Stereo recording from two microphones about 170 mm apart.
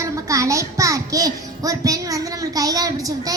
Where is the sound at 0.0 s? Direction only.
20° right (ahead or behind).